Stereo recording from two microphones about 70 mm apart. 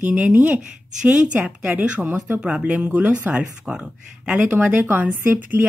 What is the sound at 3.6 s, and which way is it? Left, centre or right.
Speech, centre.